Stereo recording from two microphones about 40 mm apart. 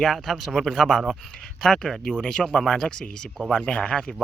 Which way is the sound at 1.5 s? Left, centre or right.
Centre.